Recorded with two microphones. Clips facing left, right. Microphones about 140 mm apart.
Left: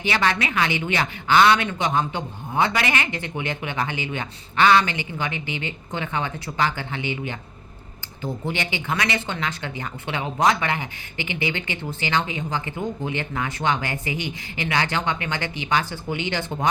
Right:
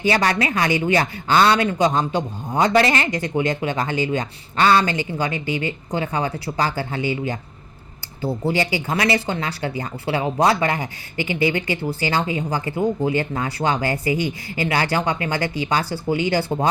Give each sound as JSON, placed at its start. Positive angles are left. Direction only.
{"t": 0.1, "sound": "speech", "side_deg": -40}
{"t": 5.3, "sound": "a woman's voice", "side_deg": 20}
{"t": 5.6, "sound": "speech", "side_deg": -35}
{"t": 8.2, "sound": "speech", "side_deg": -35}
{"t": 11.2, "sound": "a woman's voice", "side_deg": 20}
{"t": 11.5, "sound": "speech", "side_deg": -35}